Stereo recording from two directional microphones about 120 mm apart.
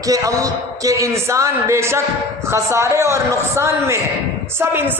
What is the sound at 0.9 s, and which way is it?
A man's voice, 25° right (ahead or behind).